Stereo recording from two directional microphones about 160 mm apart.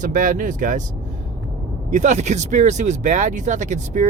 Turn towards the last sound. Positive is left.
turn(degrees=-50)  # may be behind; listen again after turning